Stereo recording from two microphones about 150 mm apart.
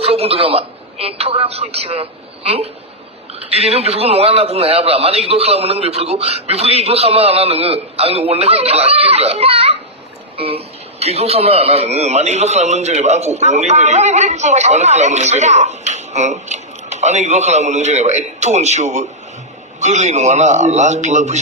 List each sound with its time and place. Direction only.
0.0 s a woman's voice: 40° right (ahead or behind)